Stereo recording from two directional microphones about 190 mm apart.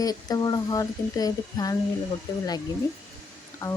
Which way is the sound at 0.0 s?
20° left (ahead or behind).